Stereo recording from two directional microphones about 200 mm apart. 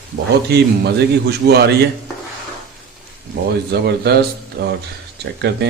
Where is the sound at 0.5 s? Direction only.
55° right (ahead or behind).